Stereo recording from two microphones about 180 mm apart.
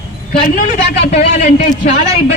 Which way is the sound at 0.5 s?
45° left (ahead or behind).